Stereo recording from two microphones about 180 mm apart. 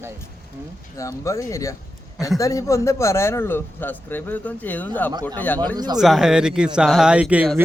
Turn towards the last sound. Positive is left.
turn(degrees=-10)  # may be behind; listen again after turning